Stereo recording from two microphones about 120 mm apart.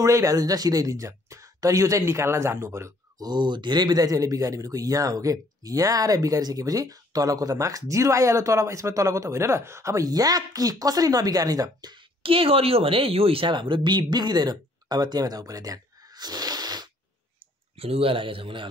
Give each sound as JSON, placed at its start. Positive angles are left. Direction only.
{"t": 0.0, "sound": "speech", "side_deg": -30}
{"t": 3.3, "sound": "speech", "side_deg": -40}
{"t": 12.2, "sound": "speech", "side_deg": -50}
{"t": 17.7, "sound": "a man's voice", "side_deg": -55}